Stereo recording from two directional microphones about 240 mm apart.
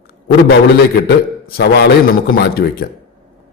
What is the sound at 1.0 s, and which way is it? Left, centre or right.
A man's voice, left.